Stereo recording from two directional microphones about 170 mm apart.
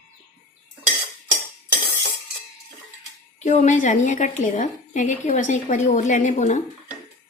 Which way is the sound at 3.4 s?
45° left (ahead or behind).